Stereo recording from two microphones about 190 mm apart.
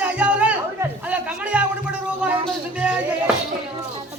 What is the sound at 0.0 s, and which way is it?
Chatter, 5° right (ahead or behind).